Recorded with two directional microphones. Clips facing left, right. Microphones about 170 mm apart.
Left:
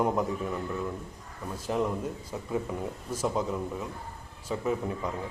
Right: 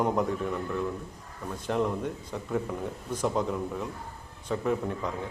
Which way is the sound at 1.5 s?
5° left (ahead or behind).